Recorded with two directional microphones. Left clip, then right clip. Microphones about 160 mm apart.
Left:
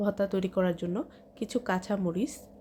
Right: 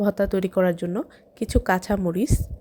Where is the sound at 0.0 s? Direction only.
40° right (ahead or behind).